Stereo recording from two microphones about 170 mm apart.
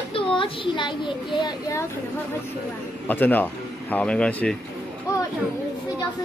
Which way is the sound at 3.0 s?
10° left (ahead or behind).